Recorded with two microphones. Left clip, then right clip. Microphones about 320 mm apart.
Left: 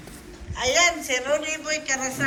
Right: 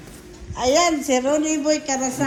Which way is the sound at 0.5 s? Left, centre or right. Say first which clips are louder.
Right 3 dB; centre.